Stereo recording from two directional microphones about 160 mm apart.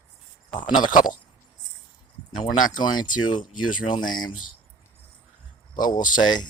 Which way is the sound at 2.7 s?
25° left (ahead or behind).